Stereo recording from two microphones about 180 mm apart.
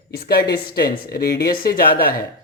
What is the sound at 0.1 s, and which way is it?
Speech, 60° left (ahead or behind).